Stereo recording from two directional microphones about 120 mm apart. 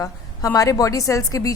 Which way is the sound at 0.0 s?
30° left (ahead or behind).